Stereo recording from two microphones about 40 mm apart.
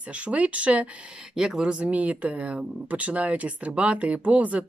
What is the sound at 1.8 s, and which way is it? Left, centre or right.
Speech, right.